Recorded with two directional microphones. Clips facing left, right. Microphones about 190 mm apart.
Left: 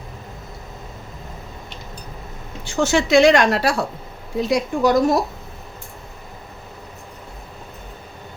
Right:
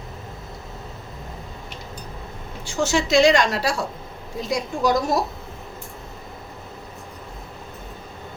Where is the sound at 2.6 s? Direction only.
60° left (ahead or behind).